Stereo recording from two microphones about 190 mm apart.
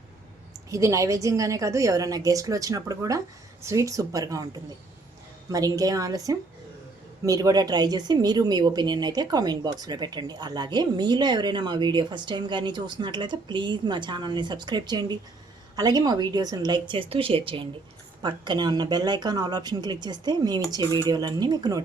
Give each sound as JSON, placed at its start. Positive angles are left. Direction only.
{"t": 0.7, "sound": "a woman's voice", "side_deg": -15}